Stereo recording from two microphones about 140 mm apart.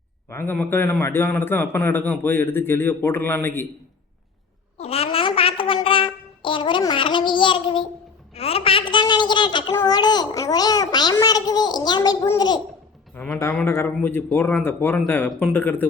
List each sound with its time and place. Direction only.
0.3 s a man's voice: 15° left (ahead or behind)
4.8 s a sound: 45° left (ahead or behind)
9.7 s a child's voice: 30° left (ahead or behind)
13.1 s a man's voice: 5° left (ahead or behind)